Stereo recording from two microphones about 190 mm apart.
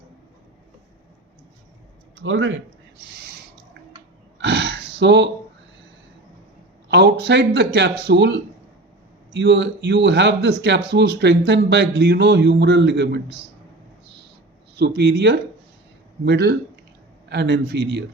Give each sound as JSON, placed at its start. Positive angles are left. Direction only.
{"t": 2.2, "sound": "speech", "side_deg": -85}
{"t": 4.4, "sound": "a sound", "side_deg": -65}
{"t": 6.8, "sound": "speech", "side_deg": -65}
{"t": 9.3, "sound": "speech", "side_deg": -65}
{"t": 14.8, "sound": "speech", "side_deg": -65}